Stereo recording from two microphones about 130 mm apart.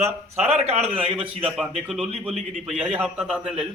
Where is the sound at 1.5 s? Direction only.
Centre (ahead or behind).